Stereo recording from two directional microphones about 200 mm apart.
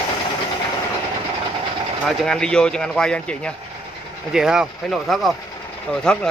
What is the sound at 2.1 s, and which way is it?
Speech, 5° left (ahead or behind).